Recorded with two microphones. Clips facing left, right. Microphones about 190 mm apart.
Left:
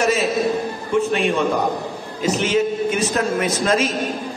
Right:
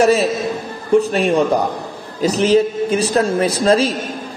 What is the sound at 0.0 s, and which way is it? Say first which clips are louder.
A man's voice: right 4 dB; 35° right (ahead or behind).